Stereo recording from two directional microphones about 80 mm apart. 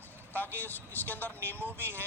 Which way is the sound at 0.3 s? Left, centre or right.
Left.